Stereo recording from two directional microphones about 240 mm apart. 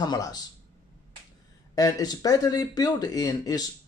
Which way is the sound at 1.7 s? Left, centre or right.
Centre.